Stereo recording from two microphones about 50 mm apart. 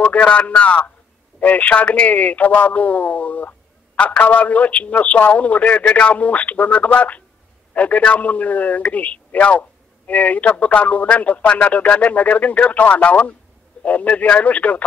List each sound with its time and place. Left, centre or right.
0.0 s a man's voice: left